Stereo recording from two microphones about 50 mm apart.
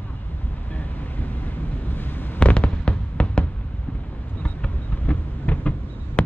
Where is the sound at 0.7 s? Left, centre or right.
Left.